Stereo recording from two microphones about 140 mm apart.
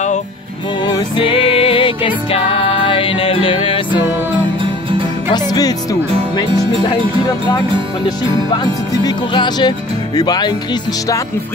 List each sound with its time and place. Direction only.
0.8 s music: 35° left (ahead or behind)
5.3 s music: 30° left (ahead or behind)
9.0 s speech: 30° left (ahead or behind)